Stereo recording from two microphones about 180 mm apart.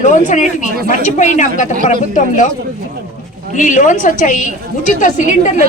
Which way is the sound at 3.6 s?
45° left (ahead or behind).